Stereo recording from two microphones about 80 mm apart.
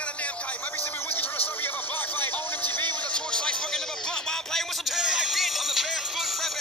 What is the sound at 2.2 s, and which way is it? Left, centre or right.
Music, left.